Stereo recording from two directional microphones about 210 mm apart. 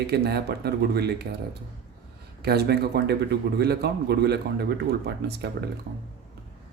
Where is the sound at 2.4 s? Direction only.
50° right (ahead or behind).